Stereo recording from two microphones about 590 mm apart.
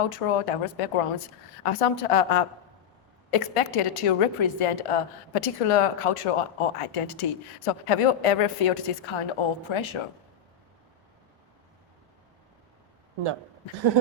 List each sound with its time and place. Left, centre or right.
0.1 s a woman's voice: left